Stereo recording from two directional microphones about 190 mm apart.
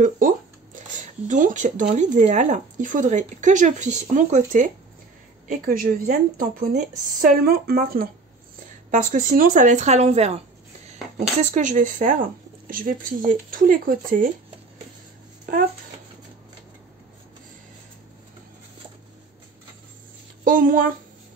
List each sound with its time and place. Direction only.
0.7 s speech: 40° right (ahead or behind)
20.4 s speech: 45° right (ahead or behind)